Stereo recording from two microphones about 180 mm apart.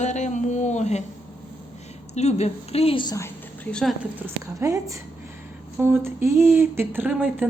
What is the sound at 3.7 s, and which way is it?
Speech, 5° left (ahead or behind).